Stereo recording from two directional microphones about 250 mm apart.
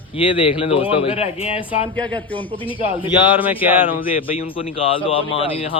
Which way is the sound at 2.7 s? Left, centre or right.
Left.